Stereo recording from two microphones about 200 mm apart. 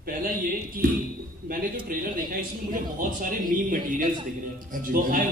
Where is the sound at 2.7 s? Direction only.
40° right (ahead or behind).